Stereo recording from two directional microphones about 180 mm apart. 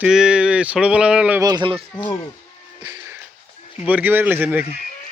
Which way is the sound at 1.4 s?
25° right (ahead or behind).